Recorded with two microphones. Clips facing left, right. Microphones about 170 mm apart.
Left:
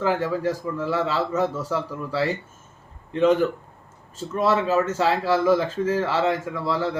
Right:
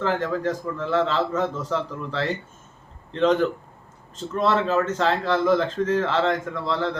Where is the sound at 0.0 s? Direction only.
10° left (ahead or behind).